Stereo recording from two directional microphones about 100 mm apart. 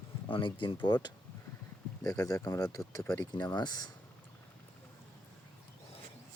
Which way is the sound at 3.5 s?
45° left (ahead or behind).